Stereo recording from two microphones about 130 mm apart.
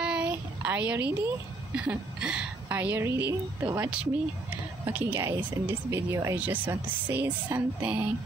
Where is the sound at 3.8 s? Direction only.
10° right (ahead or behind).